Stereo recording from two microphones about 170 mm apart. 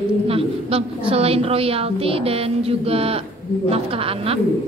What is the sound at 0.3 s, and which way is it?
A woman's voice, 35° right (ahead or behind).